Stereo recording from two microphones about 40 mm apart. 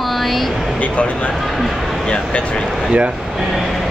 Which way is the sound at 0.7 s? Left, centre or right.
Left.